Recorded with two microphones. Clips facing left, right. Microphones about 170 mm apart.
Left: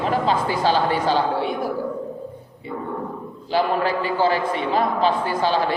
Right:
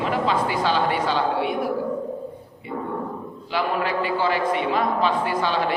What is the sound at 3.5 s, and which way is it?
Speech, 35° left (ahead or behind).